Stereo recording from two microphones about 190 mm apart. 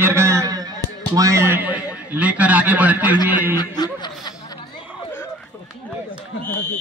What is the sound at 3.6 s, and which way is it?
Chuckle, 20° left (ahead or behind).